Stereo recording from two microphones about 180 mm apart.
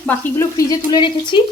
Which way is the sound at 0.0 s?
15° left (ahead or behind).